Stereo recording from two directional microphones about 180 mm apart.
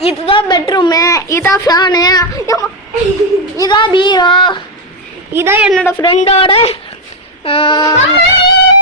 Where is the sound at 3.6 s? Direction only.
25° left (ahead or behind).